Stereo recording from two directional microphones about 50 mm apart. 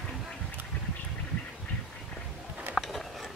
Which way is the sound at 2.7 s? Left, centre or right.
Centre.